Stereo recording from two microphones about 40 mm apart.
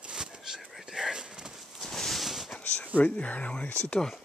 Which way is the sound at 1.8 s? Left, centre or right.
Centre.